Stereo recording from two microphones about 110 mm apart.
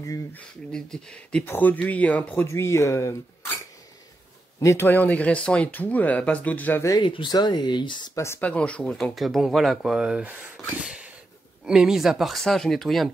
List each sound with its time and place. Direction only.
0.3 s speech: 5° left (ahead or behind)
2.4 s speech: 25° left (ahead or behind)
4.6 s speech: 25° left (ahead or behind)
7.0 s speech: 45° left (ahead or behind)
8.1 s speech: 25° left (ahead or behind)
8.4 s speech: 10° left (ahead or behind); by 10.3 s 10° right (ahead or behind)
10.8 s a sound: 5° right (ahead or behind)
11.6 s speech: 5° right (ahead or behind)